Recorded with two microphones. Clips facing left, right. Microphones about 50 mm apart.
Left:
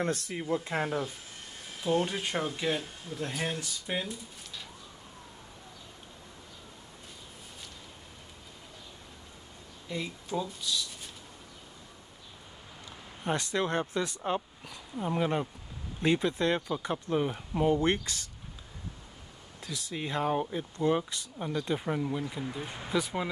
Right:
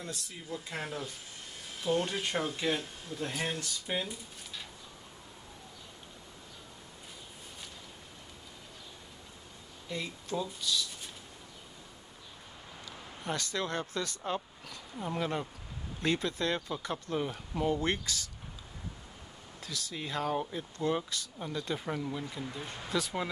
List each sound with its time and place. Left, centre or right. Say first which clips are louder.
0.0 s speech: left 11 dB; left
2.0 s speech: left 1 dB; centre
9.8 s speech: left 2 dB; centre
13.2 s speech: left 5 dB; left
17.7 s speech: left 4 dB; left
19.6 s speech: left 3 dB; left